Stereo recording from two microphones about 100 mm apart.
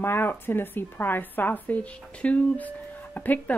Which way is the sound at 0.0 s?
25° left (ahead or behind).